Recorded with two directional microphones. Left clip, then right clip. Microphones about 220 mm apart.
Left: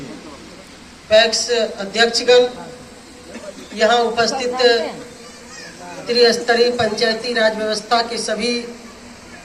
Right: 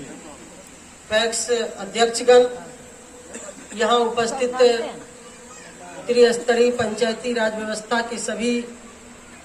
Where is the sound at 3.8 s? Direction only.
20° right (ahead or behind).